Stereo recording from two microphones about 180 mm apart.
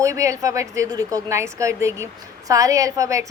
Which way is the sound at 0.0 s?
15° right (ahead or behind).